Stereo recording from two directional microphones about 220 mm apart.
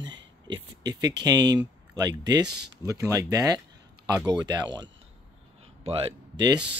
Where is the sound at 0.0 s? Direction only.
55° right (ahead or behind).